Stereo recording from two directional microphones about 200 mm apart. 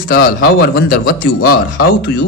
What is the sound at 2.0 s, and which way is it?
Speech, 55° left (ahead or behind).